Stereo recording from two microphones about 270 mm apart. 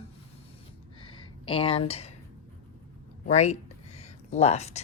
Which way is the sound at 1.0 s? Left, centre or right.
Centre.